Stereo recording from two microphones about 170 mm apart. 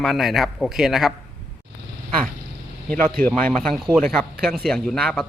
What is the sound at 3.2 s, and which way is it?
Speech, 5° left (ahead or behind).